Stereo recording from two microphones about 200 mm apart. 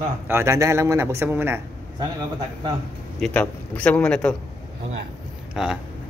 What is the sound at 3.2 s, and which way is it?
Speech, 5° left (ahead or behind).